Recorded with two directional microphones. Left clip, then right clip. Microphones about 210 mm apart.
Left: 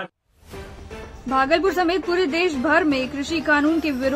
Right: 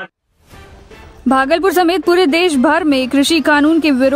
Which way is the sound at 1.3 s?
55° right (ahead or behind).